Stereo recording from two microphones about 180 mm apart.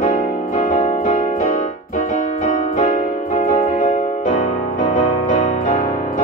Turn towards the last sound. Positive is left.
turn(degrees=45)  # may be behind; listen again after turning